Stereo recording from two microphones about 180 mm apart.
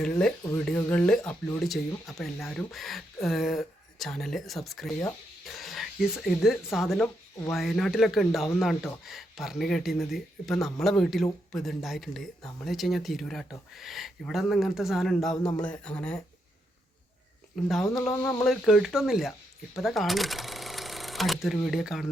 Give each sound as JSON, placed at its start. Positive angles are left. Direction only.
{"t": 0.0, "sound": "speech", "side_deg": 5}
{"t": 17.5, "sound": "speech", "side_deg": 0}
{"t": 18.0, "sound": "speech", "side_deg": 15}
{"t": 18.4, "sound": "speech", "side_deg": 0}